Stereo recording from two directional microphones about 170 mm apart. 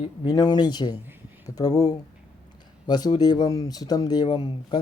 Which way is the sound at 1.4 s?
20° left (ahead or behind).